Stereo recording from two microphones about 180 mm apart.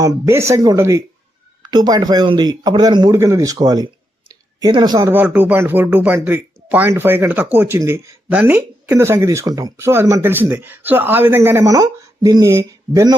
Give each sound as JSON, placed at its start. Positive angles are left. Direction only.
{"t": 0.0, "sound": "a man's voice", "side_deg": -20}